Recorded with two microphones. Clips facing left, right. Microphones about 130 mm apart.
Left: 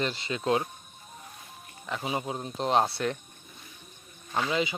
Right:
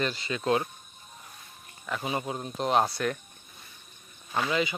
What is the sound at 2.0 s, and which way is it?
Speech, 15° left (ahead or behind).